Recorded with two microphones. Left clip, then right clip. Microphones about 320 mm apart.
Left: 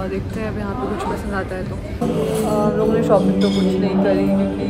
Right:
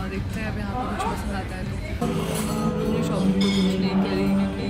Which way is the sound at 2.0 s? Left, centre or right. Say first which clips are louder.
Left 8 dB; centre.